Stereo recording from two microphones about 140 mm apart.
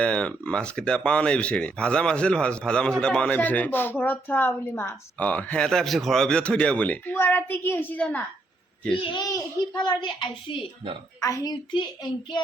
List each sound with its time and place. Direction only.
0.0 s speech: 10° left (ahead or behind)
9.0 s a child's voice: 35° left (ahead or behind)